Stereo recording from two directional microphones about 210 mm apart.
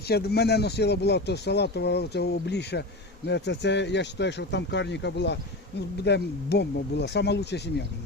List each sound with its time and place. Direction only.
0.1 s speech: 50° left (ahead or behind)